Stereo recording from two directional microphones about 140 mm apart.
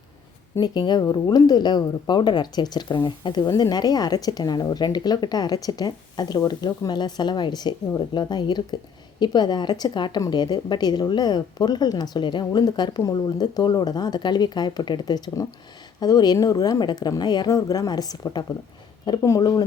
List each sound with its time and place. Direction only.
0.5 s a woman's voice: 30° left (ahead or behind)